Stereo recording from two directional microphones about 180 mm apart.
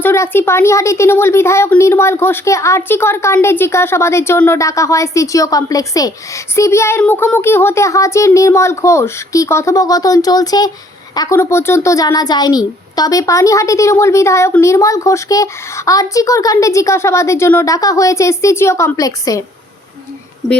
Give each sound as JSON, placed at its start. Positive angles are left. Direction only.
{"t": 0.0, "sound": "speech", "side_deg": 15}